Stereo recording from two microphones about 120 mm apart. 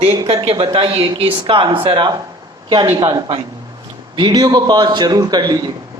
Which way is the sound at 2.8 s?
20° right (ahead or behind).